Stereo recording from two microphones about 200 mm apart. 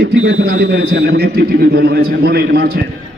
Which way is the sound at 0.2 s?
60° right (ahead or behind).